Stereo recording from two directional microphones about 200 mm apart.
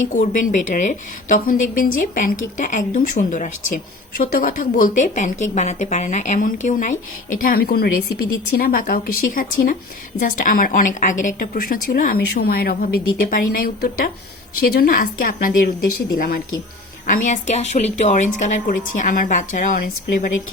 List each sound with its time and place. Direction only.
0.0 s a woman's voice: 40° left (ahead or behind)